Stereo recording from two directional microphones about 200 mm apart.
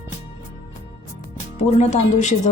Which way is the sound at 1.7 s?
35° left (ahead or behind).